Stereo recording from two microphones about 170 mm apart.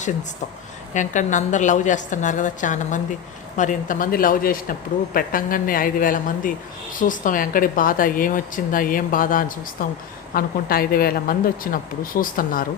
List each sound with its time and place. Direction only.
0.9 s a woman's voice: 45° left (ahead or behind)